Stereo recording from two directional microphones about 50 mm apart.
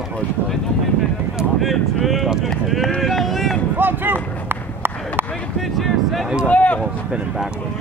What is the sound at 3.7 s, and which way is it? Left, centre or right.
Run, right.